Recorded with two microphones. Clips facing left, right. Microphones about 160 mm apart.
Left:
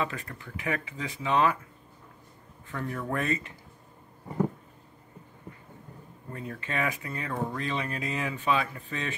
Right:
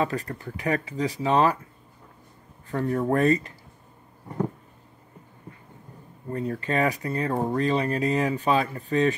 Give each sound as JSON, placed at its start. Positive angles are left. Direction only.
{"t": 0.0, "sound": "speech", "side_deg": -40}
{"t": 2.7, "sound": "speech", "side_deg": -35}
{"t": 6.3, "sound": "speech", "side_deg": -35}